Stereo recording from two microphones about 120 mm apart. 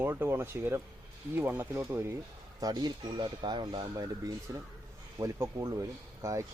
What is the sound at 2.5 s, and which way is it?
Speech, 35° right (ahead or behind).